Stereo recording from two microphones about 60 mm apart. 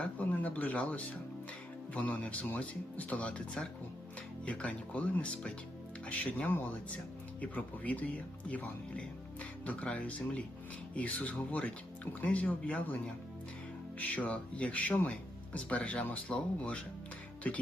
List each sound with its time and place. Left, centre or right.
0.0 s speech: left